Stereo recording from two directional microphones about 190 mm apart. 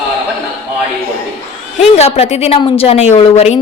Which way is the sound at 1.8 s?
35° left (ahead or behind).